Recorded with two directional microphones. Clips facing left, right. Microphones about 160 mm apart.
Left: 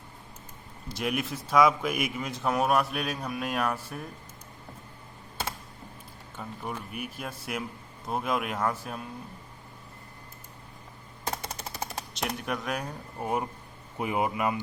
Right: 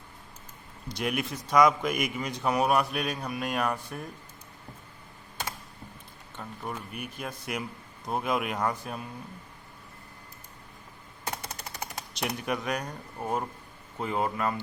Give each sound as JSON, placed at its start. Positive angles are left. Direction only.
{"t": 0.9, "sound": "speech", "side_deg": 0}
{"t": 6.3, "sound": "speech", "side_deg": 5}
{"t": 12.1, "sound": "speech", "side_deg": 0}